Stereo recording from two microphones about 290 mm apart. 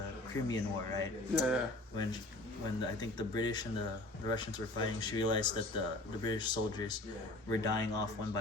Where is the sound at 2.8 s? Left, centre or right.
Centre.